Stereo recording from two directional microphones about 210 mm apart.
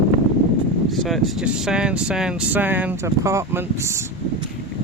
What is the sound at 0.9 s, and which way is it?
Speech, centre (ahead or behind).